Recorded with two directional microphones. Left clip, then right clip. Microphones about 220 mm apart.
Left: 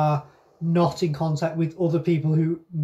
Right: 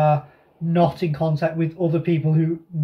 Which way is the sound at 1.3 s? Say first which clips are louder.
Right 3 dB; 15° right (ahead or behind).